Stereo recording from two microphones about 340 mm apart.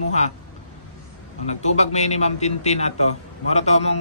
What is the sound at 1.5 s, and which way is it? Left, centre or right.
A man's voice, centre.